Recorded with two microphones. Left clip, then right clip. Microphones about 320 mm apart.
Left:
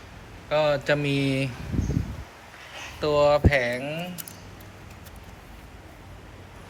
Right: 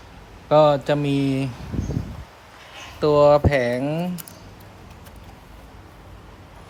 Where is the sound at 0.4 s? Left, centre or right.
Centre.